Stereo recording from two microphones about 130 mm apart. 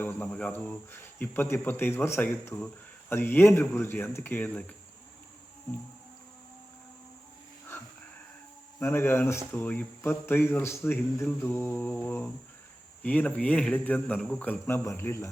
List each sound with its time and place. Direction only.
0.0 s speech: 15° left (ahead or behind)
8.8 s speech: 20° left (ahead or behind)